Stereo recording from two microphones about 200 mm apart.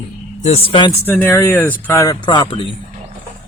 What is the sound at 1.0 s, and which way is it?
Speech, 10° left (ahead or behind).